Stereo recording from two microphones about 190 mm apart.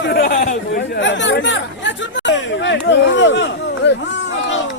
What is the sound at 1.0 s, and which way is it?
Chatter, 70° left (ahead or behind).